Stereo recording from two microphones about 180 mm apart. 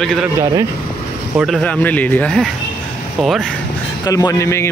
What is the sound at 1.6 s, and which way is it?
Speech, 10° left (ahead or behind).